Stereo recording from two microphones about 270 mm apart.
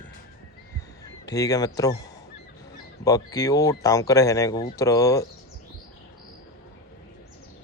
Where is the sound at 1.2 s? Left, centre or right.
Centre.